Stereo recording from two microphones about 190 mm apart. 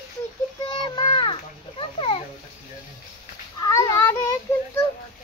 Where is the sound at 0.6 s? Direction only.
25° left (ahead or behind).